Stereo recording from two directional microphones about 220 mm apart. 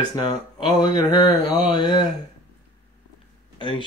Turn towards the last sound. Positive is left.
turn(degrees=20)  # may be behind; listen again after turning